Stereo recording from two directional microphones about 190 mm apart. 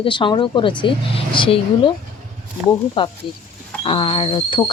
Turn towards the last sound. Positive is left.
turn(degrees=25)  # may be behind; listen again after turning